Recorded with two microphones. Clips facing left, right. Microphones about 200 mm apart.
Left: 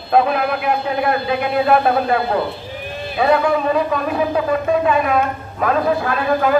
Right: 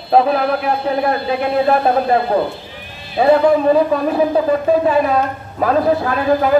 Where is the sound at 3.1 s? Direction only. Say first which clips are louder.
Right 4 dB; 30° right (ahead or behind).